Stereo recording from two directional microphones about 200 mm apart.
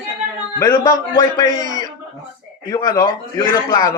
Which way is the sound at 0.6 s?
15° left (ahead or behind).